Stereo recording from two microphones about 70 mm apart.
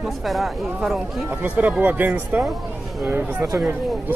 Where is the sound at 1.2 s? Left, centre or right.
Right.